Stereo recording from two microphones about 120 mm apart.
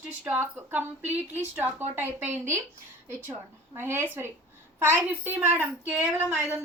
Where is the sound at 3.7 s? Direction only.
20° right (ahead or behind).